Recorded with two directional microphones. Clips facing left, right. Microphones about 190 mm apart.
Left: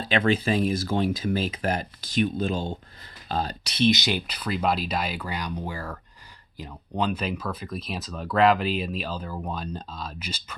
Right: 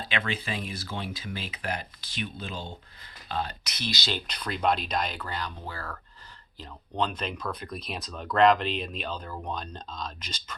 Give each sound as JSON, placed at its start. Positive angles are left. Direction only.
{"t": 0.0, "sound": "speech", "side_deg": 45}
{"t": 4.3, "sound": "speech", "side_deg": 5}